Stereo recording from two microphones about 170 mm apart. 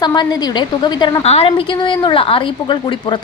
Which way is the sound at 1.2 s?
35° left (ahead or behind).